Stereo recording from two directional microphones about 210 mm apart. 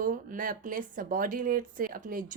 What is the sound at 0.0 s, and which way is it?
Speech, 40° right (ahead or behind).